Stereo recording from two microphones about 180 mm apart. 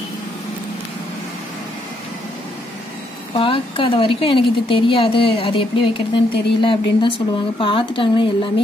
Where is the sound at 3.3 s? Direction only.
30° left (ahead or behind).